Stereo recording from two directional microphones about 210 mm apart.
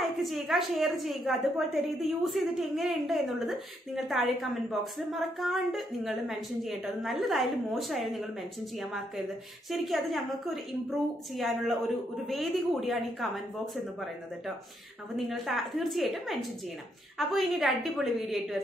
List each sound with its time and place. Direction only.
0.0 s a woman's voice: centre (ahead or behind)
15.1 s a woman's voice: centre (ahead or behind)